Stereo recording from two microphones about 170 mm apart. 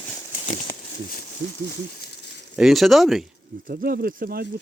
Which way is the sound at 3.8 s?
65° right (ahead or behind).